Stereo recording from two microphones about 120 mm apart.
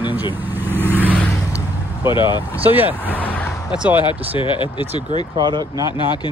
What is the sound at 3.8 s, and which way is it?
Speech, 15° right (ahead or behind).